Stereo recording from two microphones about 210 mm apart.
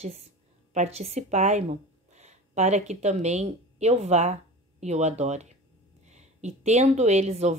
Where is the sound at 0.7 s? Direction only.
30° right (ahead or behind).